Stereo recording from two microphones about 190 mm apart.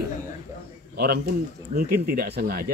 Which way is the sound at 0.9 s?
55° right (ahead or behind).